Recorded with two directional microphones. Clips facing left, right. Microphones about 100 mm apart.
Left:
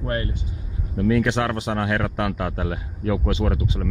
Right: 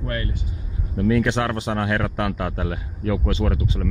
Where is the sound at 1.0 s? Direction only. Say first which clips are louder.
Even; centre (ahead or behind).